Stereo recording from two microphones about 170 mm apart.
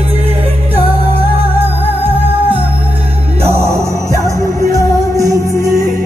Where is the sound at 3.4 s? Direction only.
15° right (ahead or behind).